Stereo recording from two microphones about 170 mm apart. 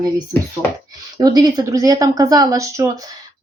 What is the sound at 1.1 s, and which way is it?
Speech, 25° right (ahead or behind).